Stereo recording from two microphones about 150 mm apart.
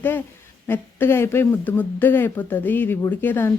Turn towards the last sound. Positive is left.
turn(degrees=15)  # may be behind; listen again after turning